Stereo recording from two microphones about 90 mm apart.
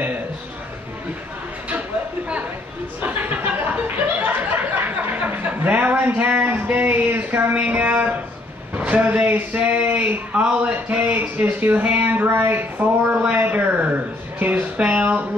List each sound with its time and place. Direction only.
3.0 s chuckle: 20° right (ahead or behind)
8.7 s speech: 15° right (ahead or behind)